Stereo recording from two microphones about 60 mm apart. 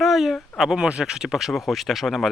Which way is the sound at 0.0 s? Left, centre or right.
Centre.